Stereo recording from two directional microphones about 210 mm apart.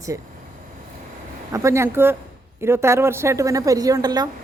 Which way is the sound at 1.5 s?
15° right (ahead or behind).